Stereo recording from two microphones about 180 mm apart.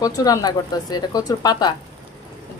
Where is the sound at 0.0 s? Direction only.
20° left (ahead or behind).